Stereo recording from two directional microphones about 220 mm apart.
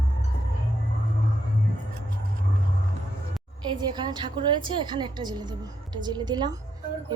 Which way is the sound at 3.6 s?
20° right (ahead or behind).